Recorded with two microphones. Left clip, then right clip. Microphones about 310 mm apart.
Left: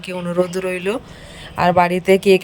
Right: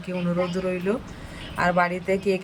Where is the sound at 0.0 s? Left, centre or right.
Left.